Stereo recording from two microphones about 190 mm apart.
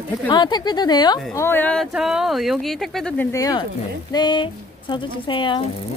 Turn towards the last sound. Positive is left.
turn(degrees=25)  # may be behind; listen again after turning